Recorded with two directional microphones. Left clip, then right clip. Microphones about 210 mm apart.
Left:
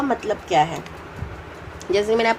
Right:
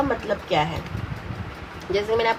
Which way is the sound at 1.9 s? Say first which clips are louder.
Left 3 dB; 50° left (ahead or behind).